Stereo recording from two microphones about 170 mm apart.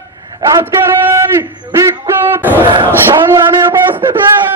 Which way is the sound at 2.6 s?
30° right (ahead or behind).